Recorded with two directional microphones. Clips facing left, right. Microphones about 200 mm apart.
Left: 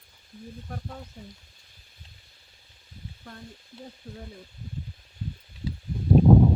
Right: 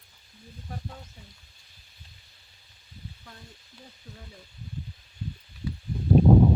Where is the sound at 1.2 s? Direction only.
50° left (ahead or behind).